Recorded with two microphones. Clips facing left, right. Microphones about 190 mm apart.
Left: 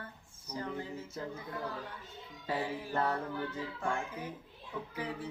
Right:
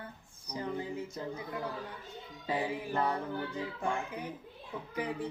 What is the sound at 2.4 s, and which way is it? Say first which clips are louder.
Speech: right 2 dB; 15° right (ahead or behind).